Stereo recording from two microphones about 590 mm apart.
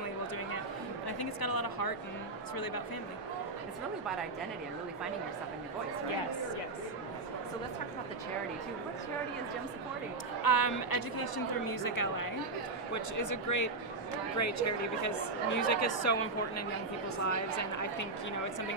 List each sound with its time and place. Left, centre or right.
1.0 s a woman's voice: left
10.4 s a woman's voice: left